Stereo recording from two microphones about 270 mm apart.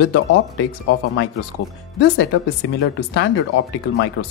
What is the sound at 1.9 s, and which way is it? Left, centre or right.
Speech, left.